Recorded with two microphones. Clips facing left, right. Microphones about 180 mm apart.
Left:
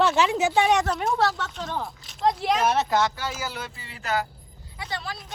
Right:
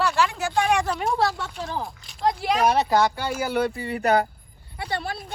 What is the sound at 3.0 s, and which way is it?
Speech, 60° right (ahead or behind).